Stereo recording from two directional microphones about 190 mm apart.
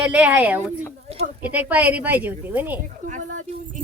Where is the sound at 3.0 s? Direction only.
40° right (ahead or behind).